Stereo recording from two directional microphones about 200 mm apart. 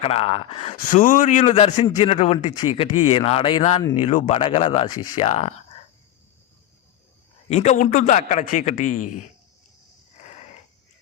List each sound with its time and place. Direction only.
0.0 s a man's voice: 30° left (ahead or behind)
7.5 s a man's voice: 35° left (ahead or behind)